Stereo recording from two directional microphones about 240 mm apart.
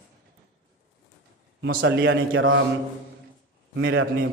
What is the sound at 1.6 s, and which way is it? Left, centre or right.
A man's voice, right.